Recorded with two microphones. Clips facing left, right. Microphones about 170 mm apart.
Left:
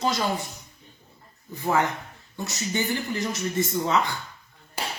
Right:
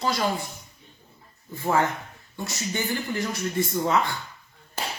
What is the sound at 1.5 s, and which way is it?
A woman's voice, 20° left (ahead or behind).